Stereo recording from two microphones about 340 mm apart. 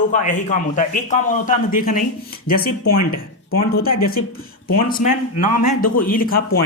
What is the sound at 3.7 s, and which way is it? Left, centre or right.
Speech, left.